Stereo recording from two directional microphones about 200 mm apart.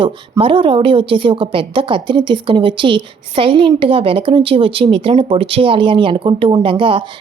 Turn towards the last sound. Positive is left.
turn(degrees=-25)  # may be behind; listen again after turning